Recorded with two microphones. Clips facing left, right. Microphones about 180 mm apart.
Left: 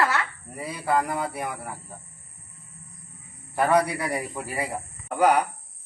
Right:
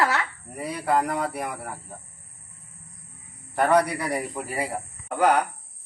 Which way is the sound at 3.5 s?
5° left (ahead or behind).